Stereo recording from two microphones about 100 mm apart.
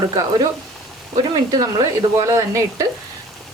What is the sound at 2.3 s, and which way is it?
Speech, 35° right (ahead or behind).